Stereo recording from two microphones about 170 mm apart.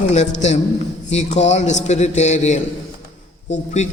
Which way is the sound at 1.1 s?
40° left (ahead or behind).